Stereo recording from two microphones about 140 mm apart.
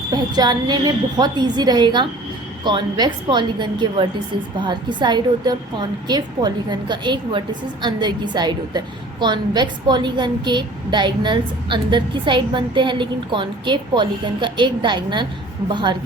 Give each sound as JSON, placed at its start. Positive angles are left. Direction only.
{"t": 0.1, "sound": "a woman's voice", "side_deg": -30}